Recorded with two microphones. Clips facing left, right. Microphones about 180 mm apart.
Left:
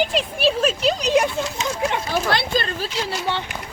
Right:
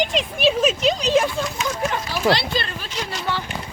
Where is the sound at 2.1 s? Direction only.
50° left (ahead or behind).